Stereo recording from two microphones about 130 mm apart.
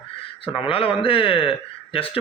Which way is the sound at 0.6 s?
45° left (ahead or behind).